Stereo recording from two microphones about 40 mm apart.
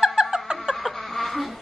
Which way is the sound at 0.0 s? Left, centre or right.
Centre.